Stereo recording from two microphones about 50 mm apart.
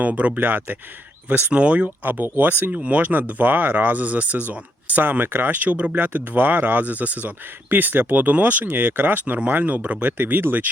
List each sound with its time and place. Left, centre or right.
0.0 s speech: right
2.0 s speech: right
2.7 s speech: right